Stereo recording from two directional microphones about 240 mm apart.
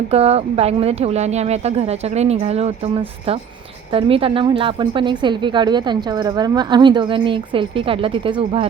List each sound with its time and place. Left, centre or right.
0.1 s a woman's voice: right